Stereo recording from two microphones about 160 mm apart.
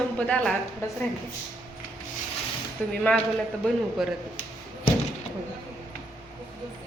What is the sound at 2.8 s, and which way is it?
Speech, 5° left (ahead or behind).